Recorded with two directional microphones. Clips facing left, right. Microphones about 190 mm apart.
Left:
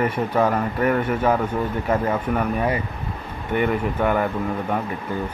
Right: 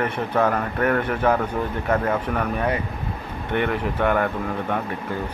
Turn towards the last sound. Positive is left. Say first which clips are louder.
# left 1 dB
turn(degrees=5)  # may be behind; listen again after turning